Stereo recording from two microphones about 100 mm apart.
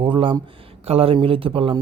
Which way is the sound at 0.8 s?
75° right (ahead or behind).